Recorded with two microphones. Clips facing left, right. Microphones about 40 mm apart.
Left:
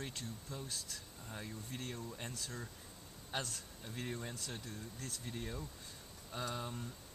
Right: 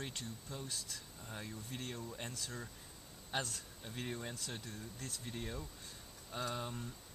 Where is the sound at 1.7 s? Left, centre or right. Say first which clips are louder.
Even; centre.